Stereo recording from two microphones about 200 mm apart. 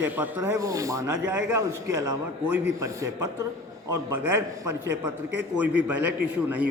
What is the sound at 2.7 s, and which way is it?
A man's voice, 15° right (ahead or behind).